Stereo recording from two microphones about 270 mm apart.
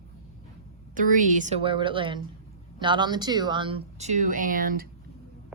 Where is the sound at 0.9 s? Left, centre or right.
Right.